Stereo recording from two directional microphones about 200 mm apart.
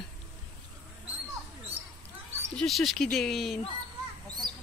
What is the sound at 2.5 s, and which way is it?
Speech, centre (ahead or behind).